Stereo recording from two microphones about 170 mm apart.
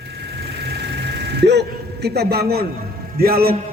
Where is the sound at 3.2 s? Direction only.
60° right (ahead or behind).